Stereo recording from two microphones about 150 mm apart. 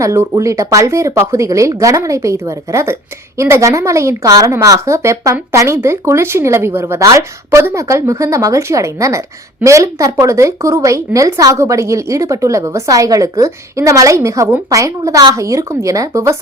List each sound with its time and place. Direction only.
0.0 s speech: 20° right (ahead or behind)